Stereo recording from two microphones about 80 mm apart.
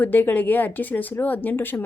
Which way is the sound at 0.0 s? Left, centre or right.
Left.